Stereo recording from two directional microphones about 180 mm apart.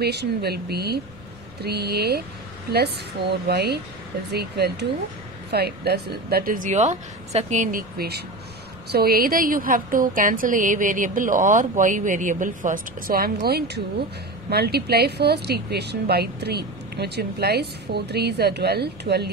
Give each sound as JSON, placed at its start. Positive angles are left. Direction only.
{"t": 0.0, "sound": "a woman's voice", "side_deg": -65}